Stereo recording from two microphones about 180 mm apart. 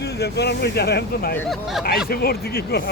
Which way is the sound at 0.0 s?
65° left (ahead or behind).